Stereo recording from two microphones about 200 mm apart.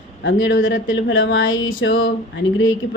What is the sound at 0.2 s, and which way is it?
Speech, 70° left (ahead or behind).